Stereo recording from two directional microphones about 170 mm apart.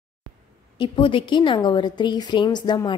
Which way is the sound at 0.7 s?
30° left (ahead or behind).